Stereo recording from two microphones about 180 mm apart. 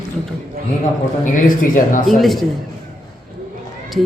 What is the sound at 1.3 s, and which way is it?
Speech, 50° left (ahead or behind).